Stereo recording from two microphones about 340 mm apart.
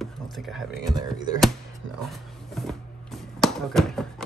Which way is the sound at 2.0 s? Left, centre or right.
Centre.